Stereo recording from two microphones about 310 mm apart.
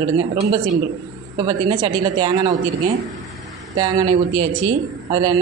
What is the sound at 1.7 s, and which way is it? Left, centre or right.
Speech, centre.